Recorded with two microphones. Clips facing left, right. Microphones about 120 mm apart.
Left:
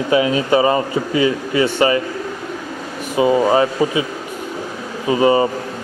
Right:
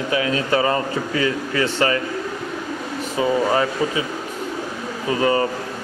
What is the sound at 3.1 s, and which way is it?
Speech, 15° left (ahead or behind).